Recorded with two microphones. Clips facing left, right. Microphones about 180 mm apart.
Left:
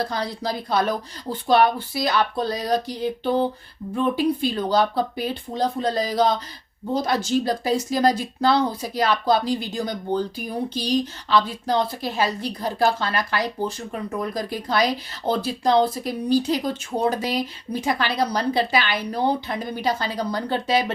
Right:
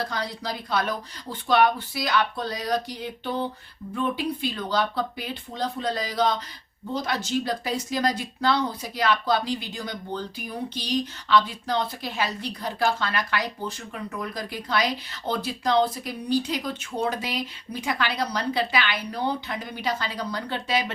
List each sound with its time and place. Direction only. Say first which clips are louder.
0.1 s speech: left 4 dB; 30° left (ahead or behind)